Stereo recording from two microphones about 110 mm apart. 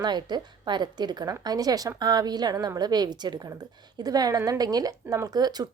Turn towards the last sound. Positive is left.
turn(degrees=-35)  # may be behind; listen again after turning